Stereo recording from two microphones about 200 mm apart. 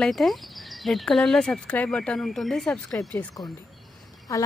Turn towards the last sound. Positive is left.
turn(degrees=15)  # may be behind; listen again after turning